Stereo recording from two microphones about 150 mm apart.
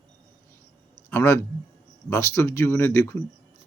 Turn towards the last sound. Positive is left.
turn(degrees=15)  # may be behind; listen again after turning